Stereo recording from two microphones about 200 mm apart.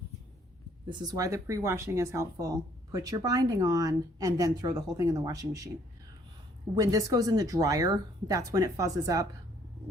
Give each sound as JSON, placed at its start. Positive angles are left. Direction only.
{"t": 0.9, "sound": "speech", "side_deg": -20}
{"t": 6.7, "sound": "speech", "side_deg": -20}